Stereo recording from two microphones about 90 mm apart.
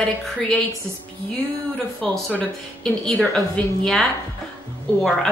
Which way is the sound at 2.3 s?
15° left (ahead or behind).